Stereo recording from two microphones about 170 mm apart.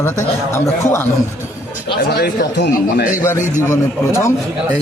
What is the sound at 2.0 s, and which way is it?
Speech, 65° left (ahead or behind).